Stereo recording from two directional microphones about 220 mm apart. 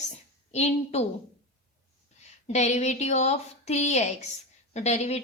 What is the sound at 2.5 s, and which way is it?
A woman's voice, 30° left (ahead or behind).